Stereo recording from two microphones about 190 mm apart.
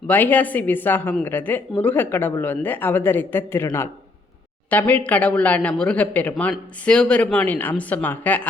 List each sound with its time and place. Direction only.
0.1 s a woman's voice: 10° left (ahead or behind)